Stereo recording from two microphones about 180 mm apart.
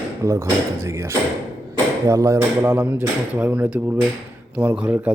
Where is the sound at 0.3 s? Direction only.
15° right (ahead or behind).